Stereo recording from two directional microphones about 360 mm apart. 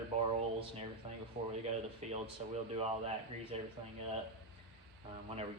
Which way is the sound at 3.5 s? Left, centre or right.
Centre.